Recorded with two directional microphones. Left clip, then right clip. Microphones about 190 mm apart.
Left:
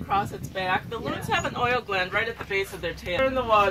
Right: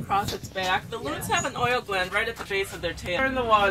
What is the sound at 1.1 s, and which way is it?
Speech, 20° right (ahead or behind).